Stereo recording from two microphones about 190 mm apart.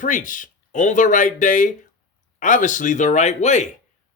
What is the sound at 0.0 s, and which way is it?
Speech, 45° left (ahead or behind).